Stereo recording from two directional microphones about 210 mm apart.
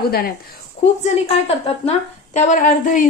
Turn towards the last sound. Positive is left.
turn(degrees=40)  # may be behind; listen again after turning